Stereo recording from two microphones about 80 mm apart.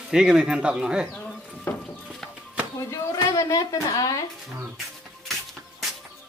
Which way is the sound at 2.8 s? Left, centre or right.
Left.